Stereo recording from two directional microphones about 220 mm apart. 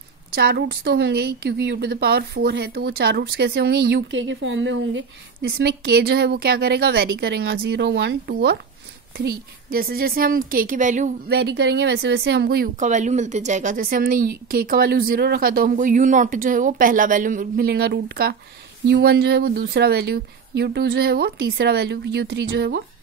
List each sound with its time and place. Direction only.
0.3 s a woman's voice: 45° right (ahead or behind)
11.2 s a woman's voice: 50° right (ahead or behind)